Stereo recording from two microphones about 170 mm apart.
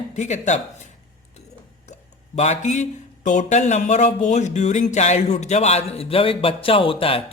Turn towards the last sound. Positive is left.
turn(degrees=35)  # may be behind; listen again after turning